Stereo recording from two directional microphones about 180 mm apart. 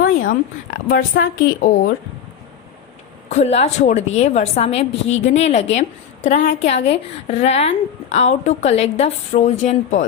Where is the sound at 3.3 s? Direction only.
40° left (ahead or behind).